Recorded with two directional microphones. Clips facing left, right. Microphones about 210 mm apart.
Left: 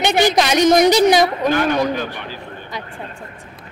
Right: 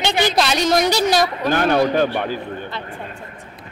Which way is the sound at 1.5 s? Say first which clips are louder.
Right 1 dB; 50° right (ahead or behind).